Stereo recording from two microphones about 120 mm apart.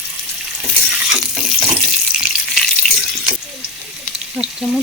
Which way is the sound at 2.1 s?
Centre (ahead or behind).